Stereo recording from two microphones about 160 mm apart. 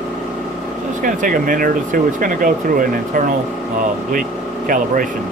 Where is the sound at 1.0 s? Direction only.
60° right (ahead or behind).